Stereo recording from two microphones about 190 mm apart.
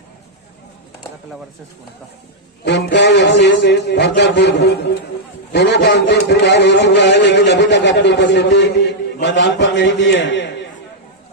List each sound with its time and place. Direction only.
2.6 s a man's voice: 65° left (ahead or behind)